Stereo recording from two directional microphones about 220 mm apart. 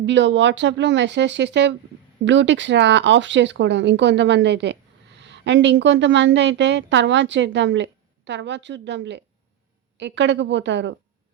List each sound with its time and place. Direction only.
0.0 s a woman's voice: 55° right (ahead or behind)